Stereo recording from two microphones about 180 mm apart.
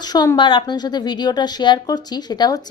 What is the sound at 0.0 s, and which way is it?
A woman's voice, 20° left (ahead or behind).